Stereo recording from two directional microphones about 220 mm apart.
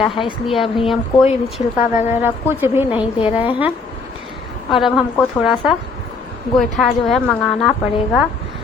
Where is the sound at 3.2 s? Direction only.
25° left (ahead or behind).